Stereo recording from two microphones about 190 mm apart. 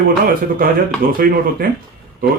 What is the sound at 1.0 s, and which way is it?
Speech, 50° right (ahead or behind).